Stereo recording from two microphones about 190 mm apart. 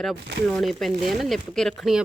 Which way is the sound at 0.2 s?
60° right (ahead or behind).